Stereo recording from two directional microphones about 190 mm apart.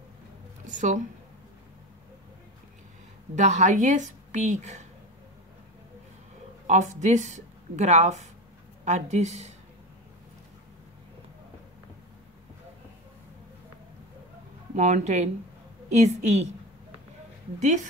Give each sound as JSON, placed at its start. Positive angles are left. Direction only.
{"t": 0.7, "sound": "a woman's voice", "side_deg": -40}
{"t": 3.3, "sound": "a woman's voice", "side_deg": -40}
{"t": 6.7, "sound": "a woman's voice", "side_deg": -40}
{"t": 14.8, "sound": "a woman's voice", "side_deg": -40}